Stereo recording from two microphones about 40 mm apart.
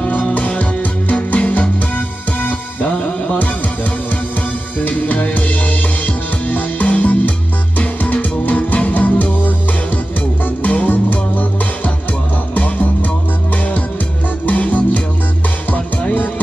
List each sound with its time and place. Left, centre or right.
0.1 s music: left
2.0 s music: left
3.0 s music: left
4.7 s music: left
10.6 s music: left
14.4 s music: left